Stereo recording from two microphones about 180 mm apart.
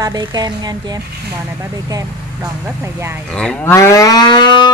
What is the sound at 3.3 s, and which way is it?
Livestock, 5° left (ahead or behind).